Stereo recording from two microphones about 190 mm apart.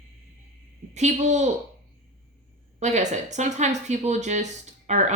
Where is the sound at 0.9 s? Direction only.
40° right (ahead or behind).